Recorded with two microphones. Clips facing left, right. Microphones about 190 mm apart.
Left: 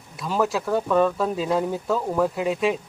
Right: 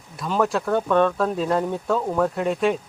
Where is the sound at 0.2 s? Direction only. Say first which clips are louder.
Right 1 dB; 5° left (ahead or behind).